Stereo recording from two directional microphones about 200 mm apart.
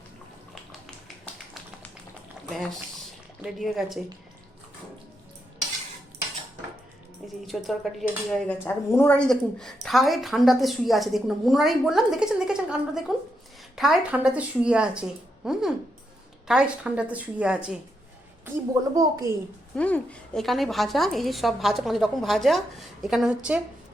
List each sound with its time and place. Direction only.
0.5 s tap: centre (ahead or behind)
2.5 s a woman's voice: centre (ahead or behind)
7.4 s a woman's voice: centre (ahead or behind)
18.9 s a woman's voice: 15° right (ahead or behind)
19.7 s a woman's voice: 5° left (ahead or behind)